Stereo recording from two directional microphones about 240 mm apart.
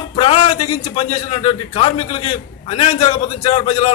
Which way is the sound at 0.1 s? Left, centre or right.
Left.